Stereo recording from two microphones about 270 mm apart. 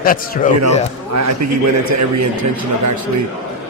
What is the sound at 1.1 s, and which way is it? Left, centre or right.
A man's voice, right.